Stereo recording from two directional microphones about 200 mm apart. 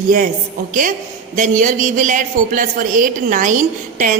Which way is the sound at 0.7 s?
40° right (ahead or behind).